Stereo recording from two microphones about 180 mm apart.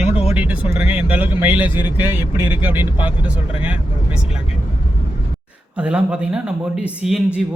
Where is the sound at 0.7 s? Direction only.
10° right (ahead or behind).